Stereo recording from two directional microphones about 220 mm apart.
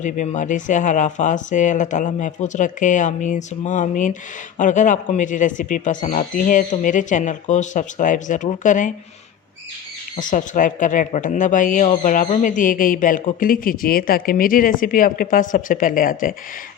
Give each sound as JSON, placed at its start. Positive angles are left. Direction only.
{"t": 0.0, "sound": "speech", "side_deg": 35}
{"t": 10.2, "sound": "speech", "side_deg": 35}